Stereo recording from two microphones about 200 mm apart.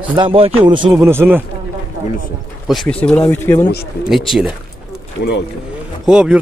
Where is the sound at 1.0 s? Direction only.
10° right (ahead or behind).